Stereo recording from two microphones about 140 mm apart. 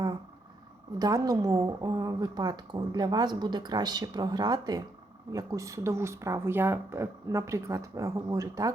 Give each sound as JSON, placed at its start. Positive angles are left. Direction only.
{"t": 0.9, "sound": "a woman's voice", "side_deg": -25}